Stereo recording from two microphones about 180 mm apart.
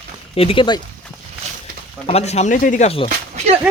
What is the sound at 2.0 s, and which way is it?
Speech, 35° left (ahead or behind).